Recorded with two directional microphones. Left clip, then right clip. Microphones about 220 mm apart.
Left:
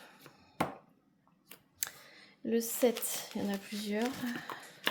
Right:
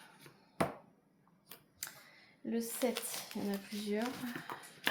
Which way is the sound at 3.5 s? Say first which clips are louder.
Right 1 dB; 50° left (ahead or behind).